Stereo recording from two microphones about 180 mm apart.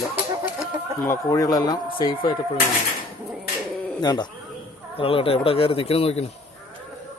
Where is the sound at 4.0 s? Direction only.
25° left (ahead or behind).